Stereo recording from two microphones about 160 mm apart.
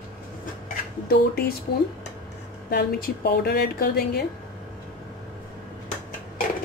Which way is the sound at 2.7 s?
80° left.